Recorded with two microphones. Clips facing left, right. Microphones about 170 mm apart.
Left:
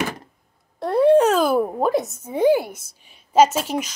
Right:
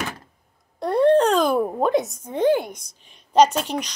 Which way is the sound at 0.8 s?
5° left (ahead or behind).